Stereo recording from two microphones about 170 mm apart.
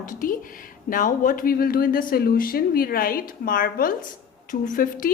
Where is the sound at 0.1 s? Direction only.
55° left (ahead or behind).